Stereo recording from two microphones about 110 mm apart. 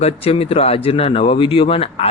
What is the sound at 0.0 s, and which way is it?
Speech, 65° left (ahead or behind).